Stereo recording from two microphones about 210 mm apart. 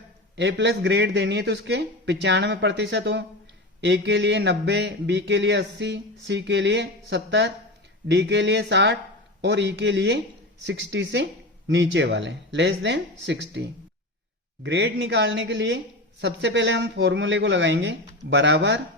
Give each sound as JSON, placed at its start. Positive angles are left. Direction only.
{"t": 0.3, "sound": "a man's voice", "side_deg": -60}